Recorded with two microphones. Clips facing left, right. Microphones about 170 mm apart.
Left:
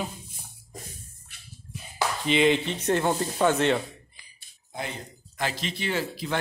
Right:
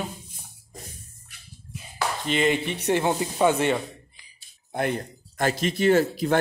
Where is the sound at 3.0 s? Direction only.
15° right (ahead or behind).